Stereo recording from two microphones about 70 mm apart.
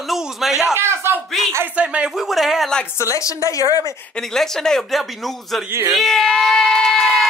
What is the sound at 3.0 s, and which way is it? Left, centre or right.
Speech, left.